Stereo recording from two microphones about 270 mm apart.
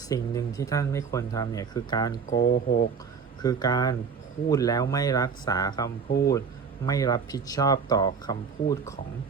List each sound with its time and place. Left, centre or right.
0.1 s speech: centre
6.1 s speech: left
6.8 s speech: centre